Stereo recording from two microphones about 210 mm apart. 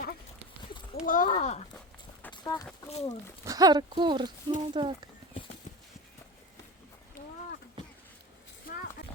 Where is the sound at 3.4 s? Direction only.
15° right (ahead or behind).